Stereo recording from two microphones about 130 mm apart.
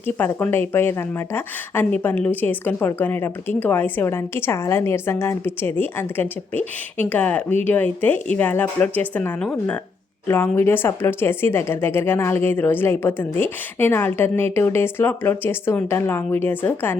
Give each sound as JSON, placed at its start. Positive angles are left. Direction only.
{"t": 0.2, "sound": "speech", "side_deg": 15}